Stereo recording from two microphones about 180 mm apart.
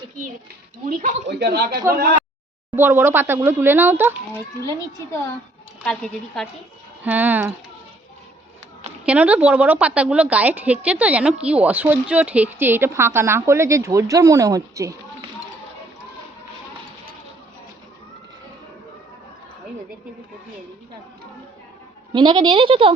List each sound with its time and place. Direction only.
0.9 s speech: 45° right (ahead or behind)
1.3 s speech: 65° right (ahead or behind)
1.7 s speech: 20° right (ahead or behind)
5.8 s speech: 5° left (ahead or behind)
7.0 s speech: 10° right (ahead or behind)
9.0 s speech: 10° right (ahead or behind)
22.1 s speech: 25° right (ahead or behind)